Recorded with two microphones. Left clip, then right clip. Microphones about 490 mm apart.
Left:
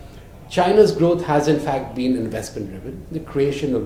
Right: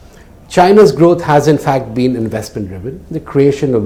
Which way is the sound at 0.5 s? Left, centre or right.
Right.